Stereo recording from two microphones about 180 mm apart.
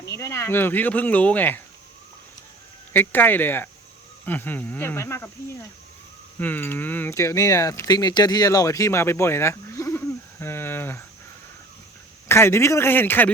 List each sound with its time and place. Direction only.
0.2 s speech: 15° left (ahead or behind)
2.9 s speech: 10° left (ahead or behind)
6.4 s speech: 10° left (ahead or behind)
10.4 s a sound: 10° left (ahead or behind)
12.3 s speech: 15° left (ahead or behind)